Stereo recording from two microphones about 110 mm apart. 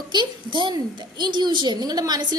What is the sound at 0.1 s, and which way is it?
A woman's voice, 45° right (ahead or behind).